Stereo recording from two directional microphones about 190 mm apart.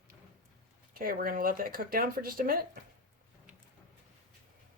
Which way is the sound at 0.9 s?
50° right (ahead or behind).